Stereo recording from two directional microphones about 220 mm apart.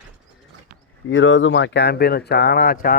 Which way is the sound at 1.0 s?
60° left (ahead or behind).